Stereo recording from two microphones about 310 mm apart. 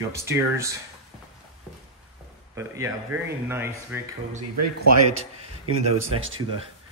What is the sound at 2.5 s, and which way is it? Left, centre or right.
Speech, centre.